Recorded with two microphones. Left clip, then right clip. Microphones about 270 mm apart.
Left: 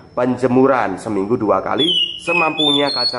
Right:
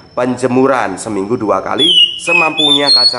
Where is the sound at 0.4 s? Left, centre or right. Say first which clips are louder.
Right 2 dB; centre.